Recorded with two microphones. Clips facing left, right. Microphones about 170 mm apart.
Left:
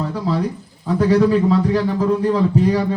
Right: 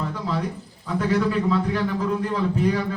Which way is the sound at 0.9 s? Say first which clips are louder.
Left 7 dB; 35° left (ahead or behind).